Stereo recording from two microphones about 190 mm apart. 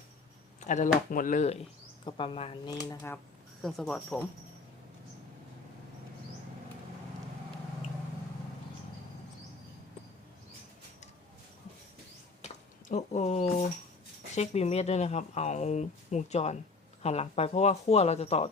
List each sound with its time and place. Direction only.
0.6 s speech: 40° left (ahead or behind)
2.0 s speech: 25° left (ahead or behind)
3.6 s speech: centre (ahead or behind)
12.9 s speech: 35° left (ahead or behind)